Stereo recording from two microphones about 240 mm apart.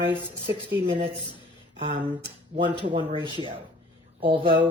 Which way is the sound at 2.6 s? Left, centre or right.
Centre.